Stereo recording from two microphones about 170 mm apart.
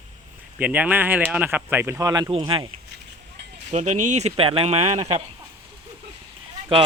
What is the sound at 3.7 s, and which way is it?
Speech, 45° right (ahead or behind).